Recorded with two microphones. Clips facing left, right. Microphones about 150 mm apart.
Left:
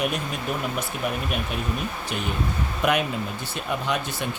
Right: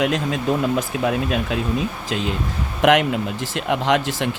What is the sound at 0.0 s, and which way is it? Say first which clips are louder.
Speech: right 7 dB; 90° right.